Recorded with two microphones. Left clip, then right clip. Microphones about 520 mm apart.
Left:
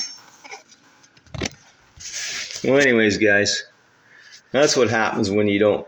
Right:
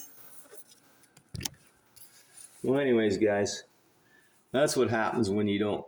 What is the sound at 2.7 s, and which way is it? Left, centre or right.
Speech, right.